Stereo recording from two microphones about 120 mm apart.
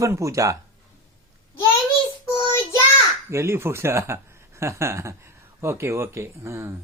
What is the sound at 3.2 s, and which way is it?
Speech, 25° right (ahead or behind).